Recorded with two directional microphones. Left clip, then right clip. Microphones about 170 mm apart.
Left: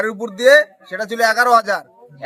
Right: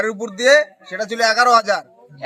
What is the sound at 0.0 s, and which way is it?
A man's voice, 15° left (ahead or behind).